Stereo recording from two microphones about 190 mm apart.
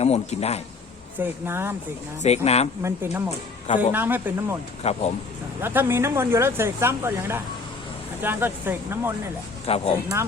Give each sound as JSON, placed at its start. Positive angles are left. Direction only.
{"t": 0.0, "sound": "a man's voice", "side_deg": 35}
{"t": 1.2, "sound": "speech", "side_deg": -10}
{"t": 2.2, "sound": "a man's voice", "side_deg": 35}
{"t": 2.8, "sound": "speech", "side_deg": -15}
{"t": 4.8, "sound": "a man's voice", "side_deg": 35}
{"t": 5.6, "sound": "speech", "side_deg": -10}
{"t": 9.6, "sound": "a man's voice", "side_deg": 30}